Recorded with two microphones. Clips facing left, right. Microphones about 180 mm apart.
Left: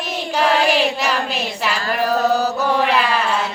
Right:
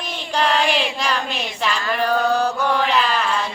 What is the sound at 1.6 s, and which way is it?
Mantra, 5° left (ahead or behind).